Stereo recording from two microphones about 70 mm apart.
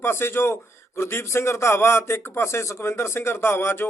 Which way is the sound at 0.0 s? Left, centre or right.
Left.